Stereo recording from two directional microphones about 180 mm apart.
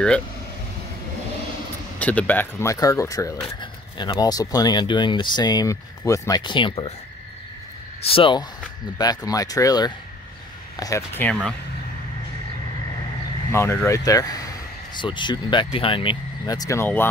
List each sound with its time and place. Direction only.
2.0 s speech: 10° left (ahead or behind); by 6.9 s 25° left (ahead or behind)
8.0 s speech: 30° left (ahead or behind); by 11.3 s 15° left (ahead or behind)
13.5 s speech: 15° left (ahead or behind)